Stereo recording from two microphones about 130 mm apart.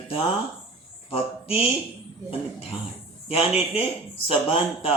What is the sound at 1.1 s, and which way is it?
Speech, 50° left (ahead or behind).